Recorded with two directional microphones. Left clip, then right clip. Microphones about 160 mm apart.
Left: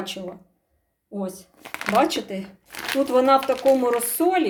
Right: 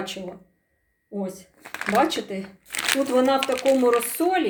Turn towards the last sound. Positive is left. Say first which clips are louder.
# left 1 dB
turn(degrees=10)  # may be behind; listen again after turning